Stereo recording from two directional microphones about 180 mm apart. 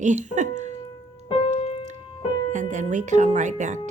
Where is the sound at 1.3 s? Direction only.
30° left (ahead or behind).